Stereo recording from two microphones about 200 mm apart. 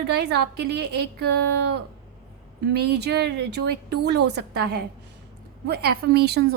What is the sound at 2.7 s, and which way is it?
A woman's voice, 55° right (ahead or behind).